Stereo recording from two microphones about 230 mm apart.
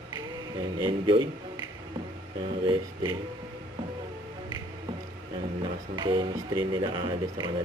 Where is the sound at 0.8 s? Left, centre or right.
Right.